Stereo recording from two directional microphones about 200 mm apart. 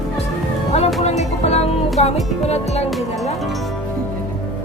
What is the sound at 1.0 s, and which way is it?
Music, 35° left (ahead or behind).